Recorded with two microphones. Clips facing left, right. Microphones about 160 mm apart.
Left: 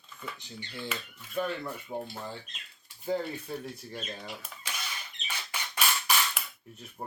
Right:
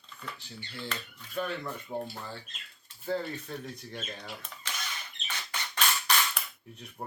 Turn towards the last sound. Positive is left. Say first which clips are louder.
# even
turn(degrees=5)  # may be behind; listen again after turning